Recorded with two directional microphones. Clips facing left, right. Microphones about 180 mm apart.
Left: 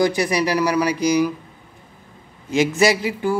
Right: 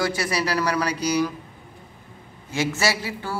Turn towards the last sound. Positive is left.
turn(degrees=15)  # may be behind; listen again after turning